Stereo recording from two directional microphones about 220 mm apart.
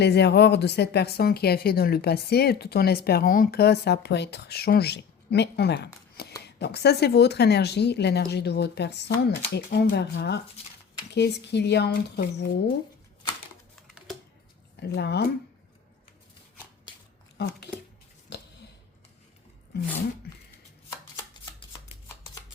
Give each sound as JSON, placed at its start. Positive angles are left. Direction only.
{"t": 0.0, "sound": "a woman's voice", "side_deg": 50}
{"t": 13.8, "sound": "typing", "side_deg": 0}
{"t": 14.8, "sound": "a woman's voice", "side_deg": 50}
{"t": 17.3, "sound": "speech", "side_deg": 50}
{"t": 18.3, "sound": "a sound", "side_deg": 50}